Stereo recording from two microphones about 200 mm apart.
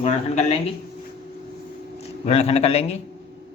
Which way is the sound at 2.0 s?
30° left (ahead or behind).